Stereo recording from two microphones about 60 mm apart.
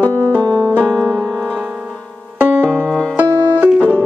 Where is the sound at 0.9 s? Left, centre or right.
Centre.